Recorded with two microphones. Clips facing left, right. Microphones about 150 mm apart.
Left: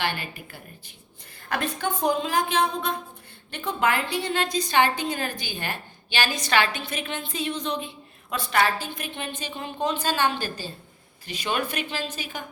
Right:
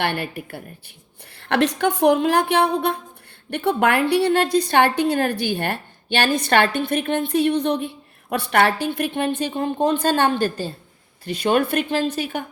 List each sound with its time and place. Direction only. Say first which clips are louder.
0.0 s a woman's voice: right 6 dB; 60° right (ahead or behind)
1.4 s a woman's voice: right 9 dB; 75° right (ahead or behind)